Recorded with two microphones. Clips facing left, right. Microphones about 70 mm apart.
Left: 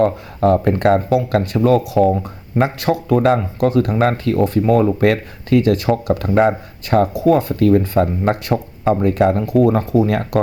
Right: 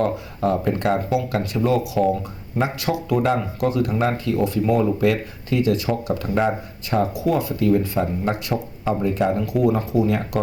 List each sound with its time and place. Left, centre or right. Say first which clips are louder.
0.3 s speech: left 8 dB; left
9.4 s speech: left 5 dB; left